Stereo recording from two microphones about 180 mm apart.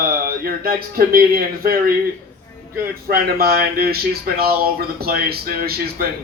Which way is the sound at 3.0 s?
55° right (ahead or behind).